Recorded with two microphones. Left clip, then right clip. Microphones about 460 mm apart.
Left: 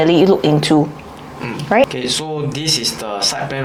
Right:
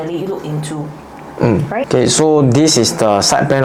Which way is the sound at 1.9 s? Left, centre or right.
Right.